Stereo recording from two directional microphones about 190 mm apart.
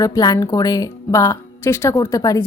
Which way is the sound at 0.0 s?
20° left (ahead or behind).